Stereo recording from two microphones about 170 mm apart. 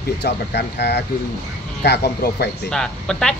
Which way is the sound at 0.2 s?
75° left (ahead or behind).